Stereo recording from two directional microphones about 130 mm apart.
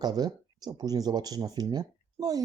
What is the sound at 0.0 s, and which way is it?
Speech, 30° right (ahead or behind).